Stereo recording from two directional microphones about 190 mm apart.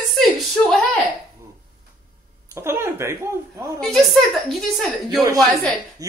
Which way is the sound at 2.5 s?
15° right (ahead or behind).